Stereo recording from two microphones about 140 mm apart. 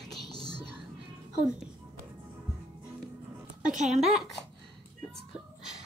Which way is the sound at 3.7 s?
55° right (ahead or behind).